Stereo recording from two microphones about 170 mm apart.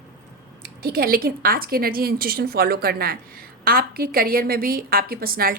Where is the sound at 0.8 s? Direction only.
60° right (ahead or behind).